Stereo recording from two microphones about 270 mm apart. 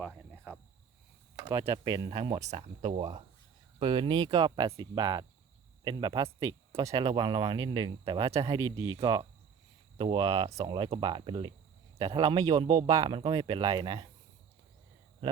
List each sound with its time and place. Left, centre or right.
0.1 s cricket: centre
1.4 s speech: centre